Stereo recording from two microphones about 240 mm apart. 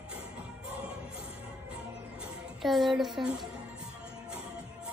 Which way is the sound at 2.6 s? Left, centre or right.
Centre.